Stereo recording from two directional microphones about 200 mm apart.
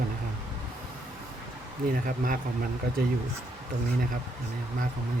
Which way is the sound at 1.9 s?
45° right (ahead or behind).